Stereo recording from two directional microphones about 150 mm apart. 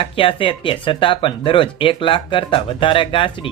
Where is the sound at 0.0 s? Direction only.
35° left (ahead or behind).